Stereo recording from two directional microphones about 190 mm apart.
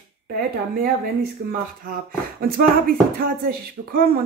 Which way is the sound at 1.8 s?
50° right (ahead or behind).